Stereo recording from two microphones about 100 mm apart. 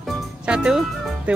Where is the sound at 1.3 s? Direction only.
15° right (ahead or behind).